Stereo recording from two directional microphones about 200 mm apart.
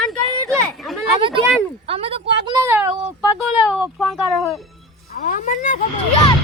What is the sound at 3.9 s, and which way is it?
Speech, centre (ahead or behind).